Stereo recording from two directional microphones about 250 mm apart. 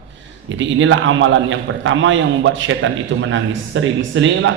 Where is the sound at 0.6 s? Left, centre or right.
Right.